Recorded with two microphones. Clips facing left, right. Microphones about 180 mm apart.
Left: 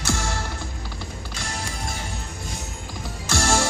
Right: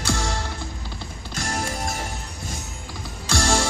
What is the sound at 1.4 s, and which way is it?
Music, 45° right (ahead or behind).